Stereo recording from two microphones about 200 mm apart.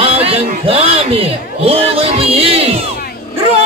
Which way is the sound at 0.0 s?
30° right (ahead or behind).